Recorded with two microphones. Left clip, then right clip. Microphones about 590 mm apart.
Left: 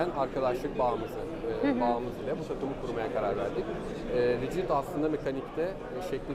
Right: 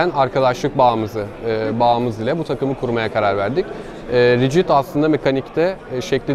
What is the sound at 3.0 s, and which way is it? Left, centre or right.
Speech, right.